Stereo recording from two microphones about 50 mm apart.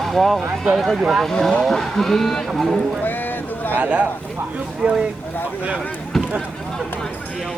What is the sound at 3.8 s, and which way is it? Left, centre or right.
Speech, right.